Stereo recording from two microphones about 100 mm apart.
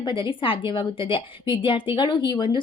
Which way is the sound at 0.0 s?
55° left (ahead or behind).